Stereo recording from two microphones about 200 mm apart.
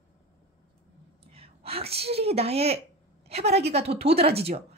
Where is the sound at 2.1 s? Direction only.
30° right (ahead or behind).